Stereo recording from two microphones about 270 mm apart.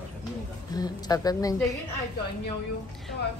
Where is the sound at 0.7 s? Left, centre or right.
Centre.